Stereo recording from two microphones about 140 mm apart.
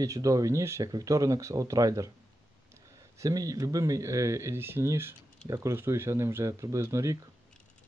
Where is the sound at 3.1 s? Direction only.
25° right (ahead or behind).